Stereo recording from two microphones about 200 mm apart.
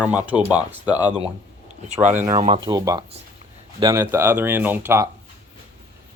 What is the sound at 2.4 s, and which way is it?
Speech, 25° right (ahead or behind).